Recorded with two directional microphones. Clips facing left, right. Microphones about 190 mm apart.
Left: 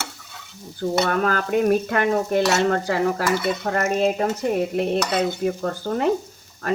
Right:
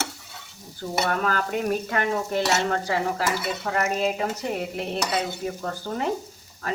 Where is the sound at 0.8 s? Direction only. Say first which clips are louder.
Left 5 dB; 45° left (ahead or behind).